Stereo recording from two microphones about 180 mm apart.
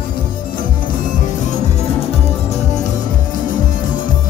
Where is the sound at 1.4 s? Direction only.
35° left (ahead or behind).